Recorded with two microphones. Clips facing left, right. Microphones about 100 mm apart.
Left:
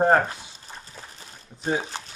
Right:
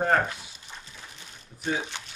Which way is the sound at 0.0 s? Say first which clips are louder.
Left 5 dB; 30° left (ahead or behind).